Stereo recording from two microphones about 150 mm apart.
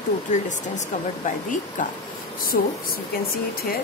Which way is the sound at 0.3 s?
55° left (ahead or behind).